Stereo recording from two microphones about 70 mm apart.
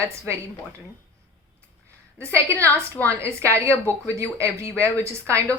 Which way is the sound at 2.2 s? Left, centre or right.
Right.